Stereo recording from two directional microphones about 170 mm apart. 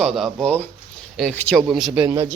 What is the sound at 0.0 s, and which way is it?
Speech, centre (ahead or behind).